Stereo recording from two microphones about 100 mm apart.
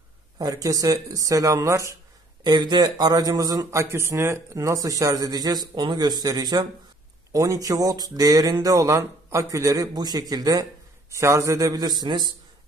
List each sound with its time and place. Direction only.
0.4 s speech: 35° right (ahead or behind)
2.4 s speech: 45° right (ahead or behind)
3.8 s speech: 25° right (ahead or behind); by 12.3 s 45° right (ahead or behind)